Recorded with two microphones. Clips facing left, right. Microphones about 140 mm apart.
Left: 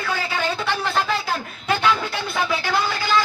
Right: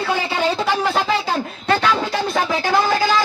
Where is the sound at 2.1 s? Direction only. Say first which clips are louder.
Right 4 dB; 40° right (ahead or behind).